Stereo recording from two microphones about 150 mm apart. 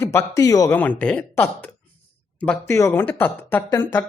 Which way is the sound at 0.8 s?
10° left (ahead or behind).